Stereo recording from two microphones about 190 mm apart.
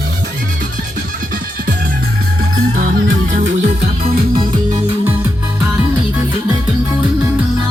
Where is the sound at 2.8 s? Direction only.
45° right (ahead or behind).